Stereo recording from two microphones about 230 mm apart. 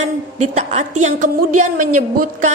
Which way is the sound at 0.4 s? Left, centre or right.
Right.